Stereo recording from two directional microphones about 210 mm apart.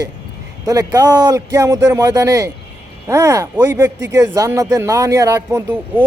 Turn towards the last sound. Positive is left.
turn(degrees=-10)  # may be behind; listen again after turning